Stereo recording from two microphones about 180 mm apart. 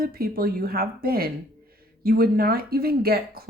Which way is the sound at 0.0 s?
55° right (ahead or behind).